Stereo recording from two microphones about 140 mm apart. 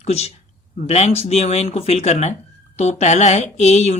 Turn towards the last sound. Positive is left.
turn(degrees=50)  # may be behind; listen again after turning